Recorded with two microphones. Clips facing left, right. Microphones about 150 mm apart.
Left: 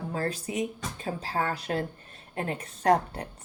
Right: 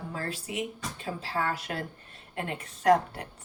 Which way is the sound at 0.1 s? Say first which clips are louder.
Left 5 dB; 40° left (ahead or behind).